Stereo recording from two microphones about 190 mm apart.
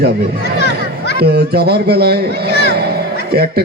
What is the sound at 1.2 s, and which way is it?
A man's voice, 55° right (ahead or behind).